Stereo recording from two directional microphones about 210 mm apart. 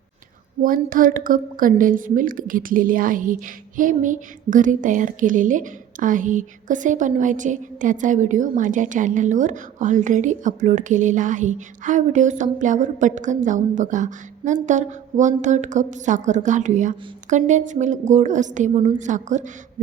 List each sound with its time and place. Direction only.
0.6 s a woman's voice: 40° right (ahead or behind)